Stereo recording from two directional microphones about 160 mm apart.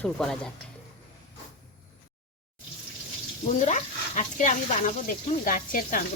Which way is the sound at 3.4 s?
50° left (ahead or behind).